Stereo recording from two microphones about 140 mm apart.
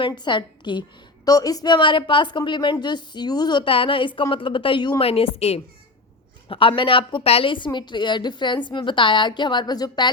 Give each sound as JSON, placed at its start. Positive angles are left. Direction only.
{"t": 0.0, "sound": "a woman's voice", "side_deg": 35}